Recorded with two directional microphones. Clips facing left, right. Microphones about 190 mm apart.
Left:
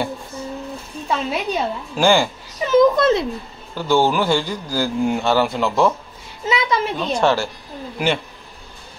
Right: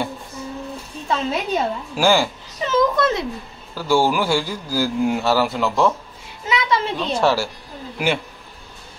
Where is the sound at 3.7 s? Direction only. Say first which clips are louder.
Left 1 dB; 10° right (ahead or behind).